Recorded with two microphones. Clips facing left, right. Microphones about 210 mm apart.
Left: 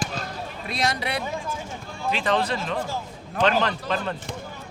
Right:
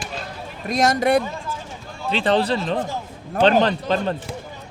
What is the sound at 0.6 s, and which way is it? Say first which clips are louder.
Speech: right 9 dB; 45° right (ahead or behind).